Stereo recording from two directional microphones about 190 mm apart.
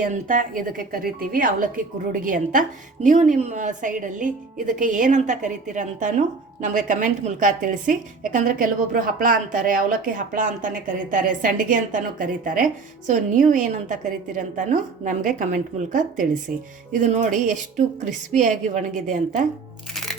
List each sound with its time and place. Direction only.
0.0 s speech: 45° right (ahead or behind)